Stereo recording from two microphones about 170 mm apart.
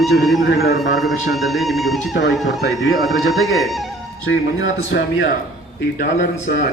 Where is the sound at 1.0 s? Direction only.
Centre (ahead or behind).